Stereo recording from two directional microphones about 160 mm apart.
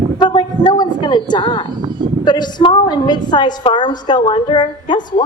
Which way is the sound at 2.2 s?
25° left (ahead or behind).